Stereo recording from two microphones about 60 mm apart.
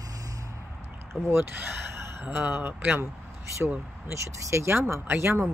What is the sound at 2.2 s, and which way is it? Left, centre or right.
Speech, right.